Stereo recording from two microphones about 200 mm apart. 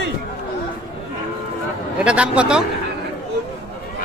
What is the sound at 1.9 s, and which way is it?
Speech, 5° right (ahead or behind).